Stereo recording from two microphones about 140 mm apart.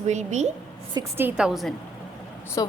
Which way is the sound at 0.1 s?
55° right (ahead or behind).